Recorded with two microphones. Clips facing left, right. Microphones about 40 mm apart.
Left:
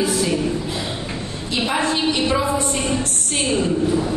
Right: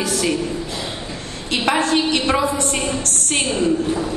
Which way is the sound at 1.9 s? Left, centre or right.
Right.